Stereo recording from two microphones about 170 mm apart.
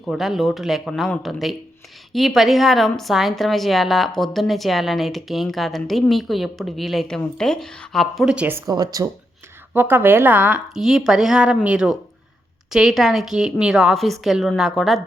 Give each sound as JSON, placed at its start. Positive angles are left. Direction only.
{"t": 0.0, "sound": "a woman's voice", "side_deg": 0}
{"t": 8.6, "sound": "speech", "side_deg": -25}
{"t": 9.7, "sound": "a woman's voice", "side_deg": -10}